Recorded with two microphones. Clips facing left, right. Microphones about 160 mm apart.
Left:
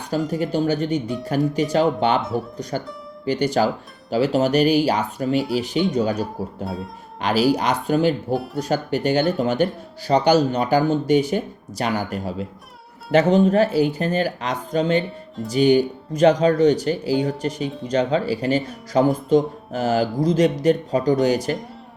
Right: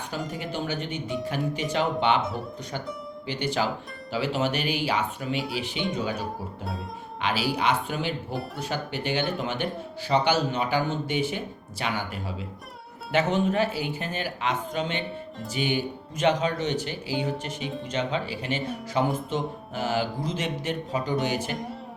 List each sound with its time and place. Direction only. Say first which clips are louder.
0.3 s speech: left 12 dB; 40° left (ahead or behind)
21.5 s music: left 4 dB; centre (ahead or behind)